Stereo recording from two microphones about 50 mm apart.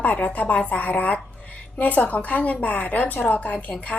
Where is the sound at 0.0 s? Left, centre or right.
Left.